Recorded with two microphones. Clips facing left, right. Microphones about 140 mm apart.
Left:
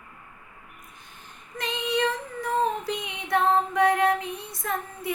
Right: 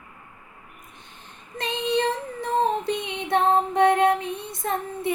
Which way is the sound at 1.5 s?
25° right (ahead or behind).